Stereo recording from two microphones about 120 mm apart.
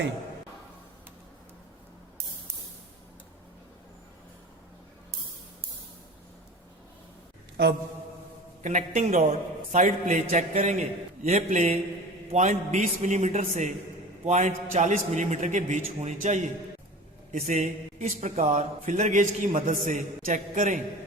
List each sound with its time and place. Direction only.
8.6 s a man's voice: 90° right